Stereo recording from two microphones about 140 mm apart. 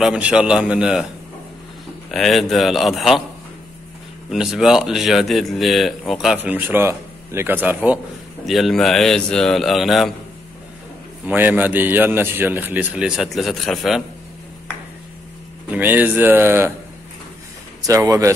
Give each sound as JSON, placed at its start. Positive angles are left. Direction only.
{"t": 0.0, "sound": "a man's voice", "side_deg": -10}
{"t": 2.0, "sound": "speech", "side_deg": 0}
{"t": 4.3, "sound": "speech", "side_deg": 0}
{"t": 8.5, "sound": "speech", "side_deg": 0}
{"t": 11.2, "sound": "a man's voice", "side_deg": -15}
{"t": 15.7, "sound": "a man's voice", "side_deg": -10}
{"t": 17.8, "sound": "speech", "side_deg": -25}